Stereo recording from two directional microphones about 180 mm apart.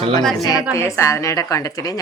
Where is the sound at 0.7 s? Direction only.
15° left (ahead or behind).